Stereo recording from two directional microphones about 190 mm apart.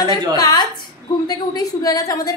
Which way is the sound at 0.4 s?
20° left (ahead or behind).